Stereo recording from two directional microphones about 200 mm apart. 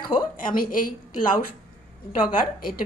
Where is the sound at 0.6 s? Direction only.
45° left (ahead or behind).